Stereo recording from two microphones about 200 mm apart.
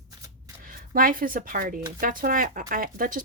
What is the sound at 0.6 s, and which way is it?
Speech, 45° right (ahead or behind).